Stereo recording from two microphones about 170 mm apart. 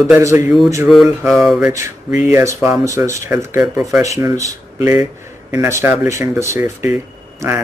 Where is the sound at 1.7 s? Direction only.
15° right (ahead or behind).